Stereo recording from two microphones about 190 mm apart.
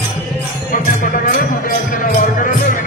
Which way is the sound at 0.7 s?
45° left (ahead or behind).